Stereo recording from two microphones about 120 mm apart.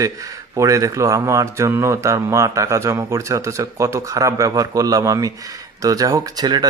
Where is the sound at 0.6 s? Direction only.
25° right (ahead or behind).